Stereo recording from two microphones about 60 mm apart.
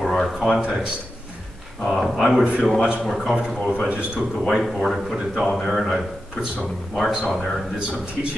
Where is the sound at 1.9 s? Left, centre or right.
Centre.